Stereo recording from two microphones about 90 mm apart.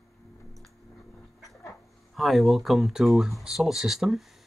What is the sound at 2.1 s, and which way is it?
Speech, centre (ahead or behind).